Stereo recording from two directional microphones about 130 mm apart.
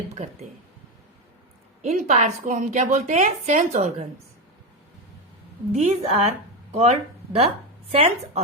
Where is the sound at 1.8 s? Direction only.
60° right (ahead or behind).